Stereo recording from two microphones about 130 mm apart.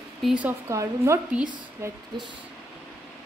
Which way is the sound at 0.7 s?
25° right (ahead or behind).